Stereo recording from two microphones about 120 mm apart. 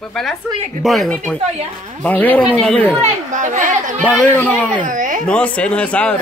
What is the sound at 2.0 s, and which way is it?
Speech, 15° left (ahead or behind).